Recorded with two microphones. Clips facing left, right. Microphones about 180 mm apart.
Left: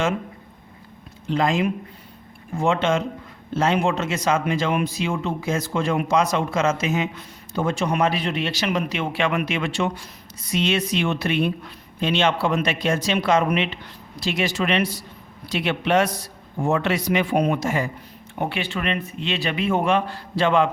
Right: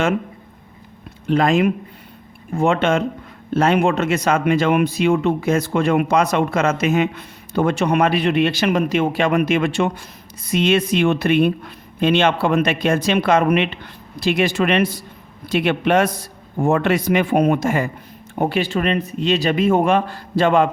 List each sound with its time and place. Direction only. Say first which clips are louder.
1.3 s a man's voice: right 5 dB; 60° right (ahead or behind)
18.3 s a man's voice: right 7 dB; 40° right (ahead or behind)